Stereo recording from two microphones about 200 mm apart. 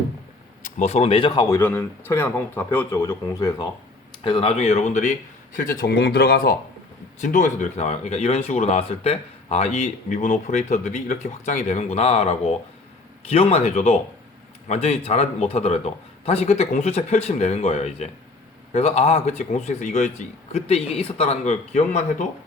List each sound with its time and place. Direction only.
0.6 s speech: 35° left (ahead or behind)
1.5 s speech: 10° left (ahead or behind)
4.2 s speech: 25° left (ahead or behind)
5.8 s speech: 55° left (ahead or behind); by 22.3 s 35° left (ahead or behind)